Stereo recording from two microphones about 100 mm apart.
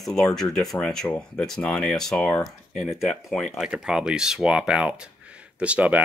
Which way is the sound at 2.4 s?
Centre (ahead or behind).